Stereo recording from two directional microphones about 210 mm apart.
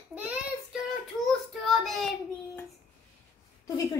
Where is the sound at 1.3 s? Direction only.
Centre (ahead or behind).